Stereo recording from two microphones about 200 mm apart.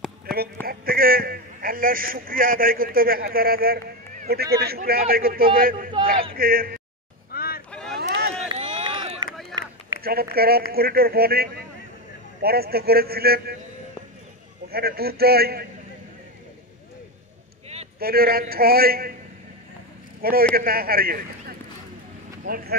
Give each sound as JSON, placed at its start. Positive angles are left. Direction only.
{"t": 0.7, "sound": "a man's voice", "side_deg": -45}
{"t": 7.2, "sound": "vehicle", "side_deg": 50}
{"t": 7.7, "sound": "boat", "side_deg": 0}
{"t": 8.0, "sound": "a sound", "side_deg": -55}
{"t": 8.5, "sound": "a sound", "side_deg": -25}
{"t": 9.5, "sound": "run", "side_deg": 0}
{"t": 10.0, "sound": "a man's voice", "side_deg": -50}
{"t": 14.7, "sound": "a man's voice", "side_deg": -50}
{"t": 17.9, "sound": "a man's voice", "side_deg": -50}
{"t": 20.2, "sound": "a man's voice", "side_deg": -50}